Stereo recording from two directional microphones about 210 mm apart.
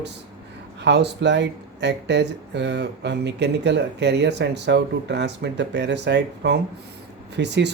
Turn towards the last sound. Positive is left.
turn(degrees=-55)  # may be behind; listen again after turning